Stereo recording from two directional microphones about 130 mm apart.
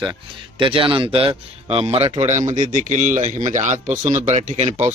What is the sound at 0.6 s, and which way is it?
A man's voice, 40° right (ahead or behind).